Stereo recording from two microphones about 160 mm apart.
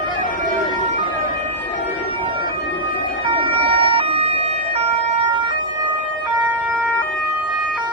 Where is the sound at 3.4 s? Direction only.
35° right (ahead or behind).